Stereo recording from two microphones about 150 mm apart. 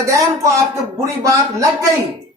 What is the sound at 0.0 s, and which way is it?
A man's voice, 20° right (ahead or behind).